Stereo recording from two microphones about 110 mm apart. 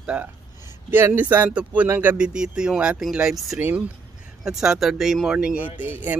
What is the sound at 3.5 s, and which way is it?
Speech, 15° right (ahead or behind).